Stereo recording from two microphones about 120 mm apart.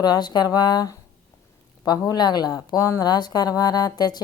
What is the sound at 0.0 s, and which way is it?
A woman's voice, 35° left (ahead or behind).